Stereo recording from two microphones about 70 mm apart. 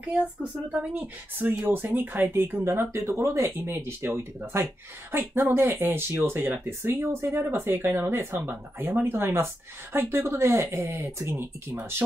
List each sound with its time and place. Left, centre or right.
0.1 s speech: centre
1.5 s speech: right